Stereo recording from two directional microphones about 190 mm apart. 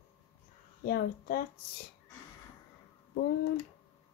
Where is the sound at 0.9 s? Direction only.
55° left (ahead or behind).